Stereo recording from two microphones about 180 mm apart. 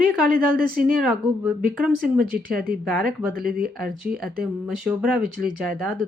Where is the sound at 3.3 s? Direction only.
55° right (ahead or behind).